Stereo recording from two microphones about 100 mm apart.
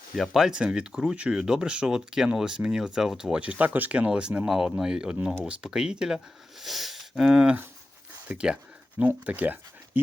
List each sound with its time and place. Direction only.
0.2 s speech: 5° right (ahead or behind)